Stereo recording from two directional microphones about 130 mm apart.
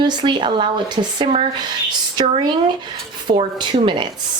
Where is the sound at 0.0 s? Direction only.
35° right (ahead or behind).